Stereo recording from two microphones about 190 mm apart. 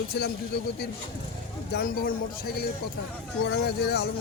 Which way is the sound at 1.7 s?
50° left (ahead or behind).